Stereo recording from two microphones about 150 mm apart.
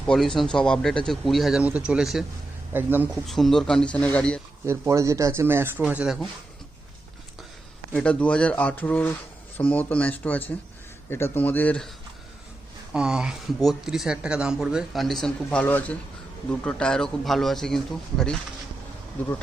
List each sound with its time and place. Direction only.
0.1 s speech: 5° left (ahead or behind); by 3.1 s 15° right (ahead or behind)
3.2 s speech: centre (ahead or behind)
4.6 s speech: 20° right (ahead or behind)
7.9 s speech: 5° left (ahead or behind)
12.9 s speech: 5° right (ahead or behind)